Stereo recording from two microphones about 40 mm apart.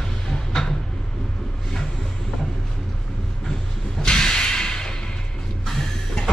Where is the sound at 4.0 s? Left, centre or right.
Centre.